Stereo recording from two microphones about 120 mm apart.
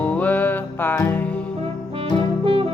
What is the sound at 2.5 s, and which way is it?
Music, 50° right (ahead or behind).